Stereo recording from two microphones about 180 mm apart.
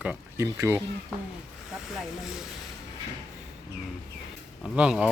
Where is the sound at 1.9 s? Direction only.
Centre (ahead or behind).